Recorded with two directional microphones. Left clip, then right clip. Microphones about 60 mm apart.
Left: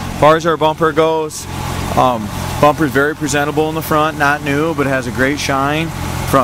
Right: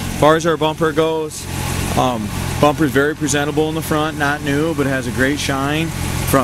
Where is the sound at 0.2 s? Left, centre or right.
Centre.